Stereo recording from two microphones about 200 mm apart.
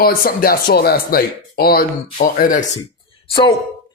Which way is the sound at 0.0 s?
45° left (ahead or behind).